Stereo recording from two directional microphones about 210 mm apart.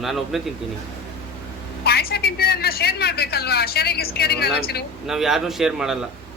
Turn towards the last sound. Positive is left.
turn(degrees=0)  # may be behind; listen again after turning